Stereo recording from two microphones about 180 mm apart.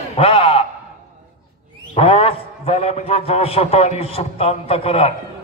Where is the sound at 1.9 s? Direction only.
30° left (ahead or behind).